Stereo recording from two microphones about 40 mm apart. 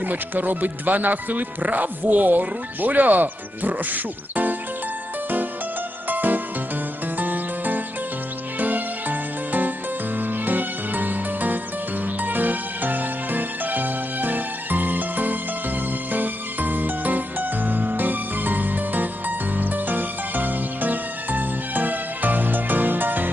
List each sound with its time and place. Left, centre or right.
0.0 s speech: right
6.1 s music: right